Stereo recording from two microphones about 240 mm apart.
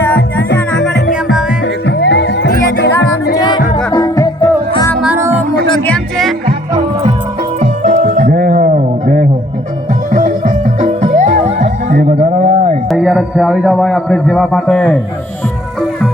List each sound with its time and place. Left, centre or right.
0.7 s music: left
3.3 s music: centre
4.9 s music: centre
7.6 s music: right
12.9 s a man's voice: centre